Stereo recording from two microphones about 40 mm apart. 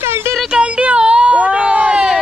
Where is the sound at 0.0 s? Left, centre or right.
Right.